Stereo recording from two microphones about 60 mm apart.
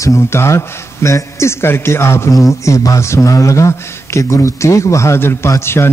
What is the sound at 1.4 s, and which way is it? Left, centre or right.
A man's voice, left.